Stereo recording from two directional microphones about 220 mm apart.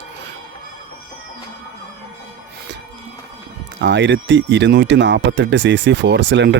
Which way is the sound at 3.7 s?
55° right (ahead or behind).